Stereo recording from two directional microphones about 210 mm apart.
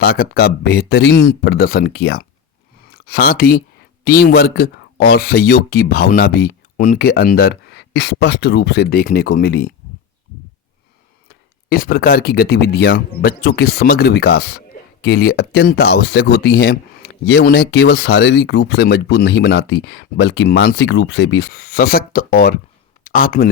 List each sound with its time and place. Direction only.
0.0 s speech: 50° left (ahead or behind)
11.3 s speech: 45° left (ahead or behind)